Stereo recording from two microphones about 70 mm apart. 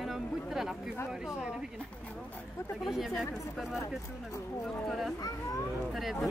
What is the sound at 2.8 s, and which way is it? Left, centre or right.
Speech, centre.